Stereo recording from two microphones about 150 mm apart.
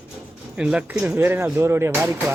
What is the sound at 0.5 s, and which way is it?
Speech, 5° right (ahead or behind).